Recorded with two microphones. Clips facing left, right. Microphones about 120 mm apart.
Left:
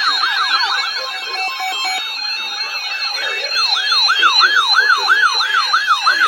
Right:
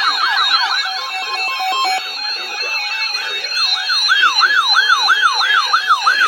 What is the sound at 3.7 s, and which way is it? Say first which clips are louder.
Emergency vehicle: left 1 dB; 80° left.